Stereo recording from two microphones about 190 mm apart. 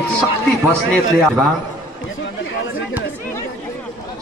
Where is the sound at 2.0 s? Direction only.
90° left.